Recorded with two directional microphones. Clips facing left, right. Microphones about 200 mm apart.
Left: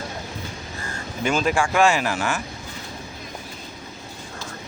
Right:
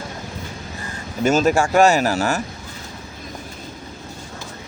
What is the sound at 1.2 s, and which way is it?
Speech, 40° right (ahead or behind).